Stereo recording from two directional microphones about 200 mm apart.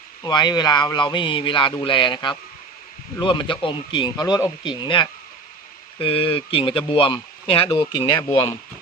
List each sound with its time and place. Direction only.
0.2 s speech: 20° left (ahead or behind)